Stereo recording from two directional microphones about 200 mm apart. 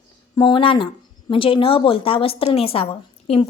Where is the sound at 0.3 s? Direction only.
25° left (ahead or behind).